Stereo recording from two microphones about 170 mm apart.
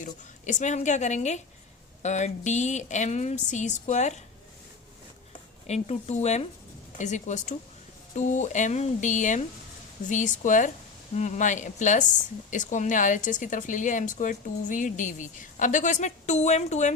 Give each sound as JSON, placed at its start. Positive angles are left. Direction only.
{"t": 0.0, "sound": "a woman's voice", "side_deg": 45}
{"t": 5.6, "sound": "a woman's voice", "side_deg": 40}